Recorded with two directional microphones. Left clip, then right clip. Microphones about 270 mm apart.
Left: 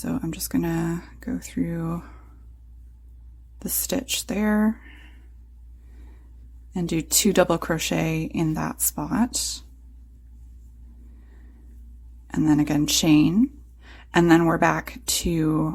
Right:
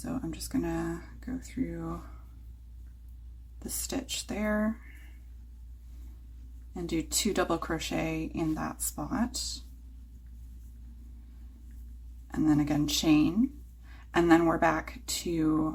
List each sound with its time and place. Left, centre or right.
0.0 s speech: left
3.8 s speech: left
6.7 s speech: left
12.3 s speech: left